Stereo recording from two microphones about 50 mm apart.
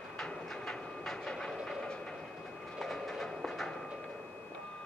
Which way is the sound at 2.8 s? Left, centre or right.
Centre.